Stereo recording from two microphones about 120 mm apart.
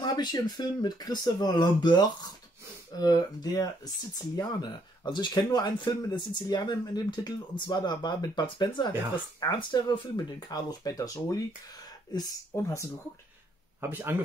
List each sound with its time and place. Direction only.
0.0 s speech: 35° left (ahead or behind)
13.7 s speech: 15° right (ahead or behind)